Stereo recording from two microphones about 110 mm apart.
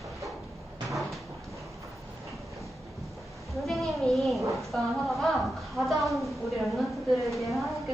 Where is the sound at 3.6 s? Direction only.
Centre (ahead or behind).